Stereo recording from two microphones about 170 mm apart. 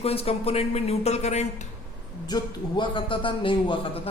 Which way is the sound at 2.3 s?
25° left (ahead or behind).